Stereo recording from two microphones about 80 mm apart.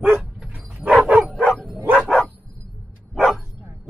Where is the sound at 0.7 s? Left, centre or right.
Centre.